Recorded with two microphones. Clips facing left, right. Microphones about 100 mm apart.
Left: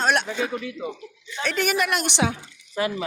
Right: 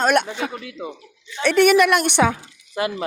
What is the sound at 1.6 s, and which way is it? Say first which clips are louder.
Speech: right 9 dB; 70° right (ahead or behind).